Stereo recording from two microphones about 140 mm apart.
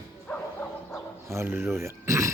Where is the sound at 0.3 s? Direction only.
5° left (ahead or behind).